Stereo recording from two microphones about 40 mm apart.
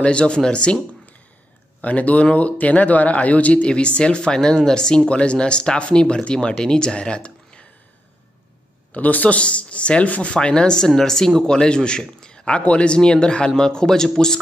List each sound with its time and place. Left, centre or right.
0.0 s speech: left
1.8 s speech: left
3.6 s speech: left
8.9 s speech: left
10.3 s a man's voice: left